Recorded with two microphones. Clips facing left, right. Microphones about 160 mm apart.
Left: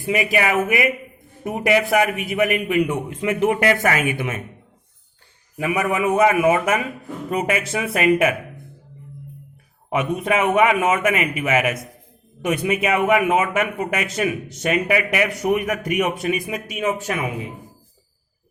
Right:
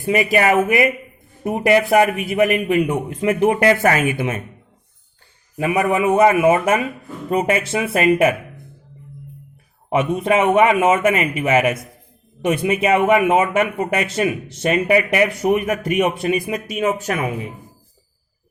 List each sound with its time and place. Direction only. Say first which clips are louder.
0.1 s a man's voice: right 4 dB; 40° right (ahead or behind)
5.5 s a man's voice: right 3 dB; 35° right (ahead or behind)
9.9 s a man's voice: right 4 dB; 30° right (ahead or behind)